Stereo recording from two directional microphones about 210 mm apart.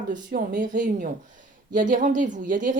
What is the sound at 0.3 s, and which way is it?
A woman's voice, 40° right (ahead or behind).